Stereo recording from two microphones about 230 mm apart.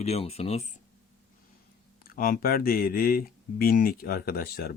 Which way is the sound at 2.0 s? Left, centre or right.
Left.